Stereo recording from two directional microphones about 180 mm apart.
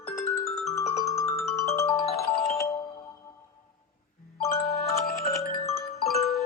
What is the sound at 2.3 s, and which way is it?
Music, 60° left (ahead or behind).